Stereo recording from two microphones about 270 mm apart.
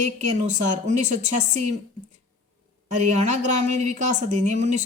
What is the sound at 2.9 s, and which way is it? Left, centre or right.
A woman's voice, right.